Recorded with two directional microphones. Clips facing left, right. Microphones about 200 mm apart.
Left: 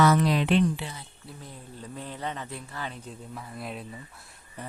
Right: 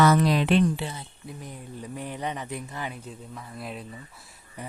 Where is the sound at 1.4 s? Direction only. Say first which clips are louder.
Right 3 dB; 15° right (ahead or behind).